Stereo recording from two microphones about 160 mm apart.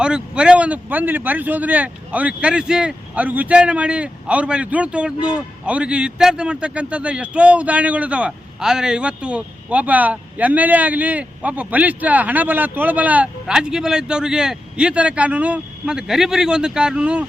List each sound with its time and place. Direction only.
0.0 s speech: 5° right (ahead or behind)